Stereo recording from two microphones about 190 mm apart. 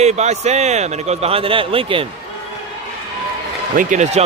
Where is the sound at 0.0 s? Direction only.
35° right (ahead or behind).